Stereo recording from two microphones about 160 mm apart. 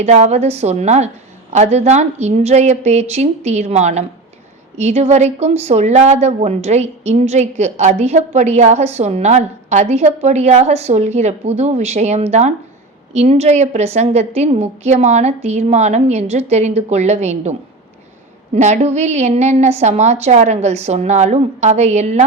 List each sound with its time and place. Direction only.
0.0 s speech: 45° right (ahead or behind)
18.5 s speech: 45° right (ahead or behind)